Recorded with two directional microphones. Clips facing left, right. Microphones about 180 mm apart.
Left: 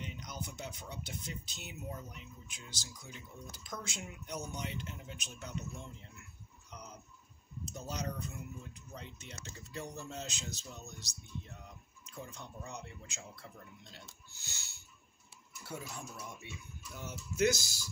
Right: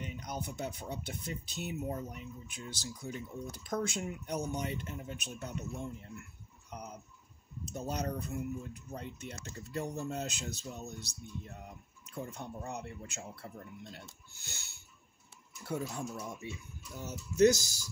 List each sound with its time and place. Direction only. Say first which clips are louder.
0.0 s speech: right 4 dB; 55° right (ahead or behind)
7.7 s speech: right 5 dB; 55° right (ahead or behind)
15.6 s speech: right 8 dB; 40° right (ahead or behind)